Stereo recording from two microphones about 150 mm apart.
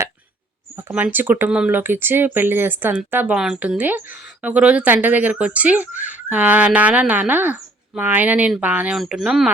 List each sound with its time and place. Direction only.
0.8 s speech: 15° right (ahead or behind)